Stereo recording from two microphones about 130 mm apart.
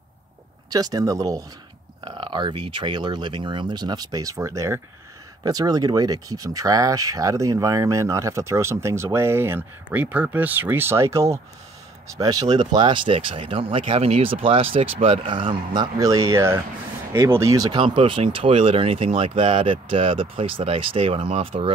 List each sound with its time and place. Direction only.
0.7 s speech: 30° right (ahead or behind)
2.0 s speech: 40° right (ahead or behind)
17.7 s speech: 45° right (ahead or behind)